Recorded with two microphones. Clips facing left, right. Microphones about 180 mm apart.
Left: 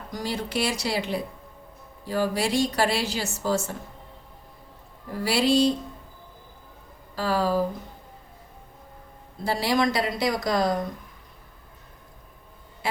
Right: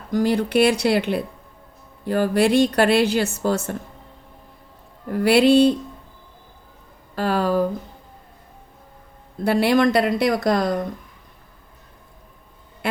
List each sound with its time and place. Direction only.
0.1 s a woman's voice: 55° right (ahead or behind)
5.1 s a woman's voice: 60° right (ahead or behind)
7.2 s a woman's voice: 60° right (ahead or behind)
9.4 s a woman's voice: 60° right (ahead or behind)